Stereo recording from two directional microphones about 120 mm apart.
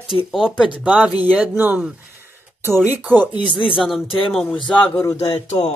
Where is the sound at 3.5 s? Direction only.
45° left (ahead or behind).